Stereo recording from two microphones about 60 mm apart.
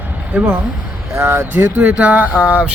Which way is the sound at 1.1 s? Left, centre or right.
Right.